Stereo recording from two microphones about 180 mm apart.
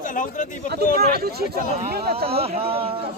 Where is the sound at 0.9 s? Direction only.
60° right (ahead or behind).